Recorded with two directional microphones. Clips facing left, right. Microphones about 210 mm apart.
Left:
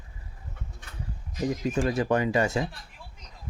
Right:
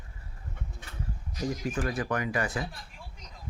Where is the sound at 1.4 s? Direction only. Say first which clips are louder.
Left 5 dB; 20° left (ahead or behind).